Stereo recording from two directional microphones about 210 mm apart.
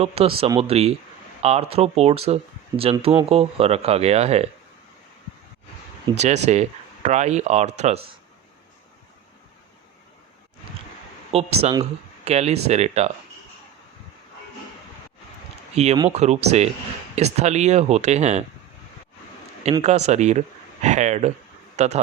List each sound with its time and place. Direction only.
0.0 s speech: 30° right (ahead or behind)
6.1 s speech: 30° right (ahead or behind)
11.3 s speech: 30° right (ahead or behind)
15.7 s speech: 30° right (ahead or behind)
19.8 s a man's voice: 30° right (ahead or behind)